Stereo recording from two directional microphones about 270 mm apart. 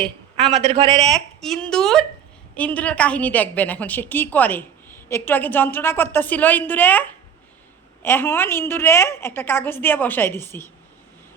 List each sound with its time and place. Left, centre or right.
0.0 s speech: centre
0.6 s speech: right
1.0 s a woman's voice: centre